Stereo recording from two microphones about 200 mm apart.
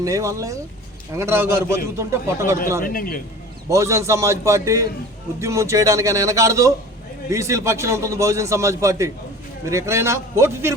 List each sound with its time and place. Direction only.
0.0 s a man's voice: 15° right (ahead or behind)
2.8 s a man's voice: 45° left (ahead or behind)
3.7 s a man's voice: 15° right (ahead or behind)